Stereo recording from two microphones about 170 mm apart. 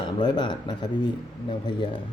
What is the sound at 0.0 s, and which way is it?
Speech, 25° left (ahead or behind).